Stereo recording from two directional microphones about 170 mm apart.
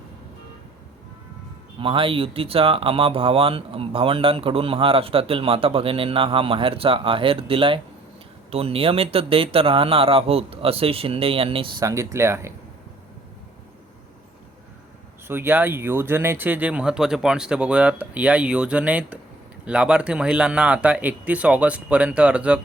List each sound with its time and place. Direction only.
1.8 s speech: 30° right (ahead or behind)
11.9 s speech: 15° right (ahead or behind)
15.3 s speech: 10° right (ahead or behind)